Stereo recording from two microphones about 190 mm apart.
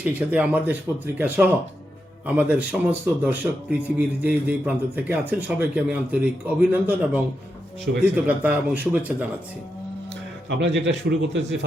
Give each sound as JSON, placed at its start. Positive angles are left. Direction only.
{"t": 0.0, "sound": "speech", "side_deg": -10}
{"t": 10.6, "sound": "a man's voice", "side_deg": -70}